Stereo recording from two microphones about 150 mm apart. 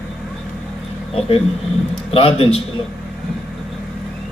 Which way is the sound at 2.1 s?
40° left (ahead or behind).